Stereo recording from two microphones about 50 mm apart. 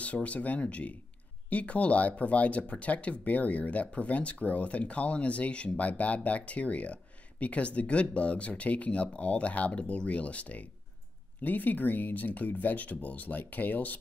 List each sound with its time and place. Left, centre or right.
0.0 s speech: left